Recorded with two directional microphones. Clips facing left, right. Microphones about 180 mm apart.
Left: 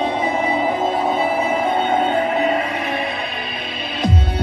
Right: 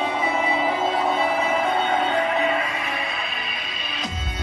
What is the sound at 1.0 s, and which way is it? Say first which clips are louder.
Music: left 3 dB; 30° left (ahead or behind).